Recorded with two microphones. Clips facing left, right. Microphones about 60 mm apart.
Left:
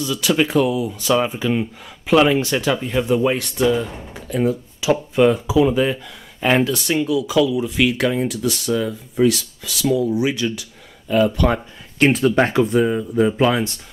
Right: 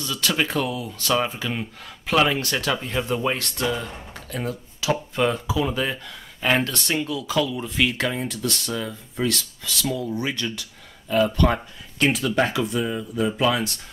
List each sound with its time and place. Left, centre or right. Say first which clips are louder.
0.0 s speech: left 6 dB; centre
12.0 s speech: left 6 dB; left